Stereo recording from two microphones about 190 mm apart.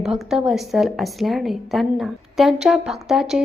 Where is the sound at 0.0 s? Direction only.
Centre (ahead or behind).